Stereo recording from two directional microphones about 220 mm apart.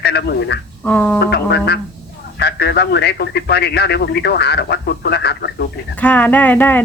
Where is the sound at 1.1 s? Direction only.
50° left (ahead or behind).